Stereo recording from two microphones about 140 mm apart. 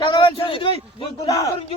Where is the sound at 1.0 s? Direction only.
25° left (ahead or behind).